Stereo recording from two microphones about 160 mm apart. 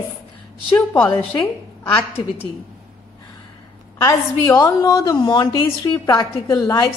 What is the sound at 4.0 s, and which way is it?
A woman's voice, 20° left (ahead or behind).